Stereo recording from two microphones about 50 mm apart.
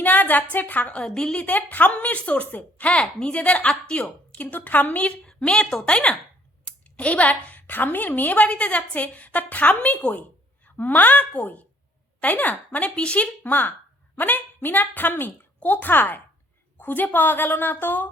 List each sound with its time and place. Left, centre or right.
0.0 s a sound: left
0.5 s a woman's voice: left
1.0 s a woman's voice: centre
4.4 s a woman's voice: left
5.3 s a woman's voice: centre
13.4 s a woman's voice: left